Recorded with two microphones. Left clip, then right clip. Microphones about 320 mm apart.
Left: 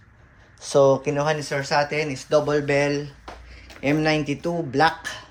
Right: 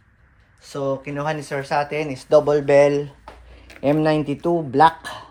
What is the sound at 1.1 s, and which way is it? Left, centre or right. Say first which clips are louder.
Speech: left 2 dB; centre.